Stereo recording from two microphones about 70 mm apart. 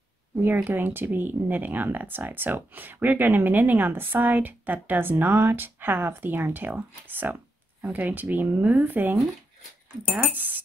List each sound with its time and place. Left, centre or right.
0.7 s speech: right